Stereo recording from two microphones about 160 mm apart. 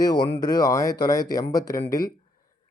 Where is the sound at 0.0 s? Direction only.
25° left (ahead or behind).